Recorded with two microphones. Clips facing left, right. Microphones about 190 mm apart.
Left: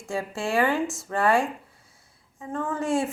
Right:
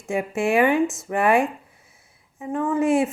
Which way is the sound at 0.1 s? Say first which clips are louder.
Right 6 dB; 20° right (ahead or behind).